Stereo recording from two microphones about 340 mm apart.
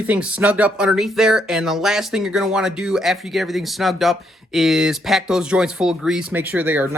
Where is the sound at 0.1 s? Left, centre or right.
Centre.